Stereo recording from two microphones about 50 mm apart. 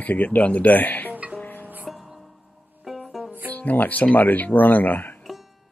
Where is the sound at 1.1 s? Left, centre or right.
Right.